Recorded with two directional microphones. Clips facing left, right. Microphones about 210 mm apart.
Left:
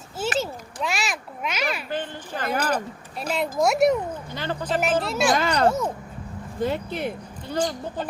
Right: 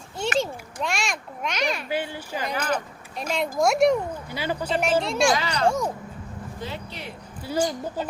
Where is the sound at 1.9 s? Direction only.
10° right (ahead or behind).